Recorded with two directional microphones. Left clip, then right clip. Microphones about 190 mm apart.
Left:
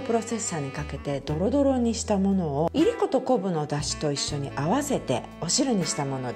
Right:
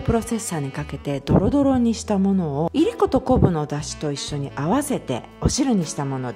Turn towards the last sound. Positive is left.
turn(degrees=-20)  # may be behind; listen again after turning